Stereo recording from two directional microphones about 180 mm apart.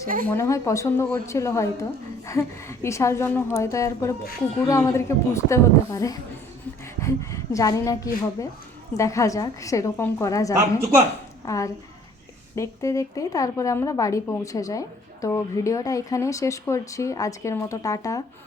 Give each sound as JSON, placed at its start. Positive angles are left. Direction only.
{"t": 0.3, "sound": "a woman's voice", "side_deg": 15}